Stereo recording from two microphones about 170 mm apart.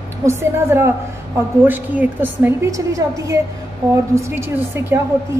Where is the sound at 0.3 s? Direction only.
15° right (ahead or behind).